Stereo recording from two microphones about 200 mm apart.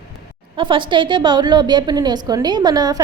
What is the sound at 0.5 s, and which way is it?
A woman's voice, 25° right (ahead or behind).